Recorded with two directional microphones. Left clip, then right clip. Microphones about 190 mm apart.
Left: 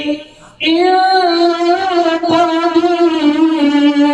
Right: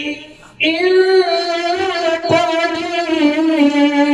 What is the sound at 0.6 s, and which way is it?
Female singing, 35° right (ahead or behind).